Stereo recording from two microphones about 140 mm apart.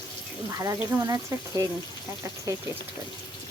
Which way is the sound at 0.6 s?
25° right (ahead or behind).